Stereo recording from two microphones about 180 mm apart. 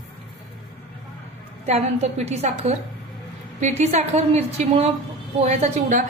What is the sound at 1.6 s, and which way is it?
A woman's voice, 35° right (ahead or behind).